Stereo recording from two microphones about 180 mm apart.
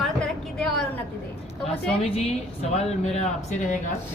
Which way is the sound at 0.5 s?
5° left (ahead or behind).